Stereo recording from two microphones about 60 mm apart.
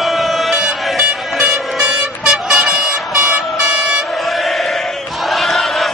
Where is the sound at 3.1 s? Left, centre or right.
Right.